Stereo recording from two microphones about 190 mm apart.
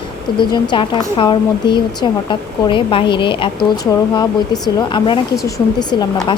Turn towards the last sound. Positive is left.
turn(degrees=20)  # may be behind; listen again after turning